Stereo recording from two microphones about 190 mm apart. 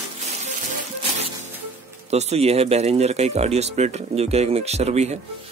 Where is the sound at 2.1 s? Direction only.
35° right (ahead or behind).